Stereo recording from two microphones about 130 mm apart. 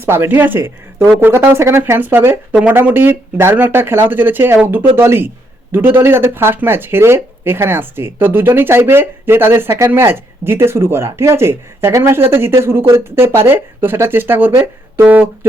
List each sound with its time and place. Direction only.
0.0 s speech: 15° right (ahead or behind)